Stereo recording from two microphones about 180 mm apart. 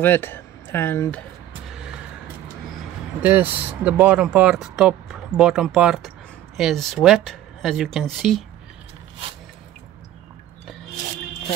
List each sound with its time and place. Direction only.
0.0 s speech: 10° left (ahead or behind)
1.7 s vehicle: 5° right (ahead or behind)
3.2 s speech: 10° right (ahead or behind)